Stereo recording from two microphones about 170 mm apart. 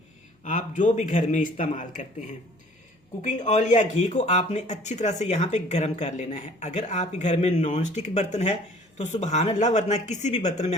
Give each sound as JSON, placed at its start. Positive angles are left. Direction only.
{"t": 0.4, "sound": "speech", "side_deg": 45}